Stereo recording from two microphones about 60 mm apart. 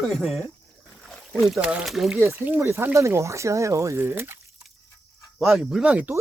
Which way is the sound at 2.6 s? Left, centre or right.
Right.